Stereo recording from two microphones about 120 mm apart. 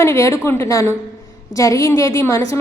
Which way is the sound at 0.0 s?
25° left (ahead or behind).